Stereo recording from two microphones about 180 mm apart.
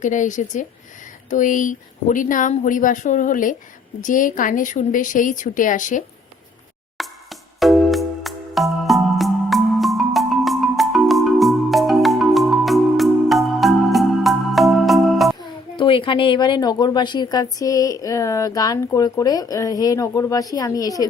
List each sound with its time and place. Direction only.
0.0 s a woman's voice: 45° left (ahead or behind)
6.9 s music: centre (ahead or behind)
15.4 s a woman's voice: 30° left (ahead or behind)